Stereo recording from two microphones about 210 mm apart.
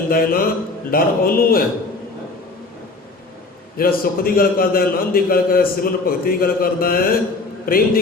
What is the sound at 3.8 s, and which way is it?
A man's voice, 45° left (ahead or behind).